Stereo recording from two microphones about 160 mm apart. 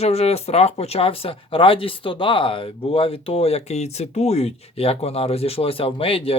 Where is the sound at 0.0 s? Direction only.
40° left (ahead or behind).